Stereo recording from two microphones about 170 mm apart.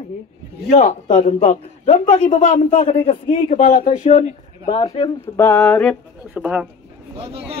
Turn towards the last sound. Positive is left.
turn(degrees=-35)  # may be behind; listen again after turning